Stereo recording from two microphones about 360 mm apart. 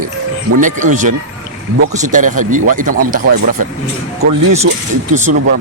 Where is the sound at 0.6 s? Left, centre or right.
Right.